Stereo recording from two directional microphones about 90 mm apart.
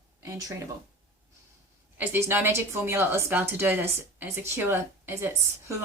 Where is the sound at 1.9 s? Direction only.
25° right (ahead or behind).